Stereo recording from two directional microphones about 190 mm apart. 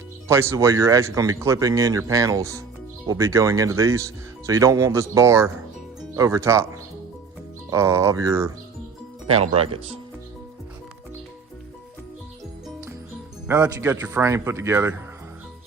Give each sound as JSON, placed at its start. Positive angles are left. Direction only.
{"t": 0.3, "sound": "speech", "side_deg": -15}
{"t": 7.7, "sound": "speech", "side_deg": -15}
{"t": 9.2, "sound": "speech", "side_deg": -30}
{"t": 13.5, "sound": "speech", "side_deg": -15}